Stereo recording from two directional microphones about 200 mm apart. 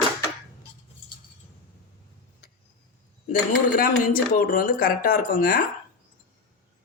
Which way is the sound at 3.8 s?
45° left (ahead or behind).